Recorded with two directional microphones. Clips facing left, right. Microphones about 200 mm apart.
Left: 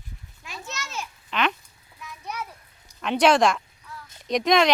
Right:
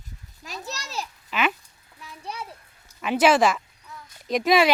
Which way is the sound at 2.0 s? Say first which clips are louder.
Left 1 dB; 30° right (ahead or behind).